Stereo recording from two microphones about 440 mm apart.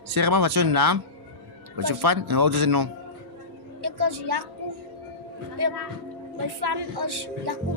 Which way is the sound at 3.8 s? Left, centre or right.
Right.